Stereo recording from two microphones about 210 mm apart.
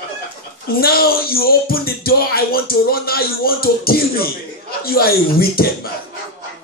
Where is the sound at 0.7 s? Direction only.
45° left (ahead or behind).